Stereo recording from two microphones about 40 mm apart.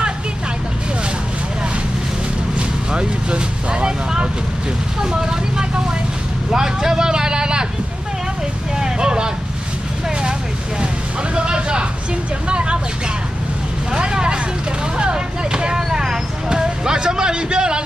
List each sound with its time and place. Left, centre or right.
2.9 s speech: right
8.7 s vehicle: centre
11.3 s a sound: right
12.4 s speech: right
13.9 s vehicle: right
15.0 s a sound: right